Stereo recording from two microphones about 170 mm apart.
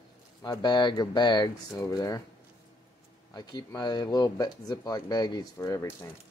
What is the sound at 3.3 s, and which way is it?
Speech, 25° left (ahead or behind).